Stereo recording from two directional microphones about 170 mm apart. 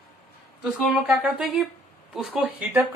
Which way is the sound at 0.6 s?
Centre (ahead or behind).